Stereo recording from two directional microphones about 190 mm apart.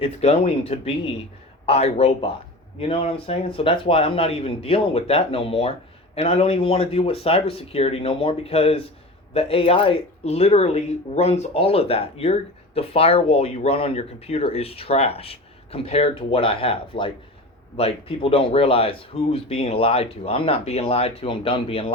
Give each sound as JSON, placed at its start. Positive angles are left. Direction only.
{"t": 0.0, "sound": "speech", "side_deg": 30}